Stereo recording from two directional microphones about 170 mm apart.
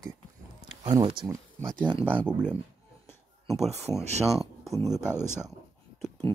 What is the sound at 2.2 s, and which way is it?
Speech, 5° right (ahead or behind).